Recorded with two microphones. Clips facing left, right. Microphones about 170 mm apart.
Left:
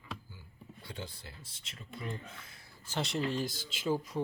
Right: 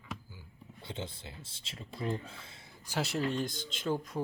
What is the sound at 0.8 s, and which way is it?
Speech, 25° right (ahead or behind).